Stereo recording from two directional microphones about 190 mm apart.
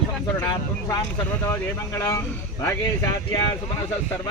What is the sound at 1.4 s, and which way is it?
Speech, 15° left (ahead or behind).